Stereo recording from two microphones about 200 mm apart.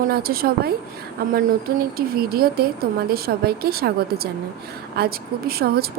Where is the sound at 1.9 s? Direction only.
50° right (ahead or behind).